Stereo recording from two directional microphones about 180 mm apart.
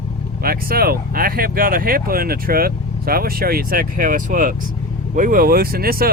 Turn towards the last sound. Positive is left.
turn(degrees=-55)  # may be behind; listen again after turning